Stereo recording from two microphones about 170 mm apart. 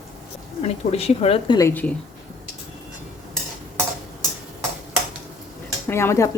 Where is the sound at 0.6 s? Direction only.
35° left (ahead or behind).